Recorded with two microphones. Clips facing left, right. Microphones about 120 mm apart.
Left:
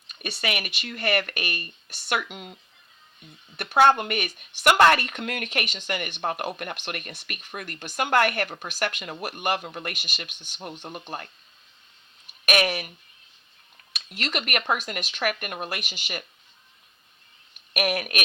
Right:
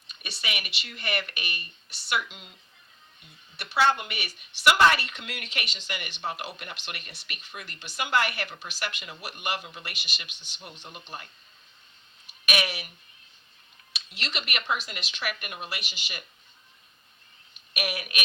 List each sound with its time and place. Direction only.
0.1 s speech: 50° left (ahead or behind)
3.6 s speech: 50° left (ahead or behind)
12.5 s speech: 50° left (ahead or behind)
13.9 s speech: 50° left (ahead or behind)
17.7 s speech: 50° left (ahead or behind)